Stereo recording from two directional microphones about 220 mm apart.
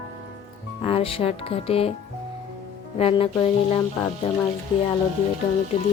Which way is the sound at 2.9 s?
25° left (ahead or behind).